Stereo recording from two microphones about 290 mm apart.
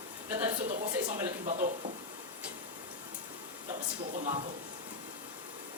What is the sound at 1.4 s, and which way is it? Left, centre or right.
Speech, right.